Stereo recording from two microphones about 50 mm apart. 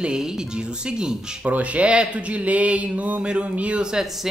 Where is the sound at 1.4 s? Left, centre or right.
Right.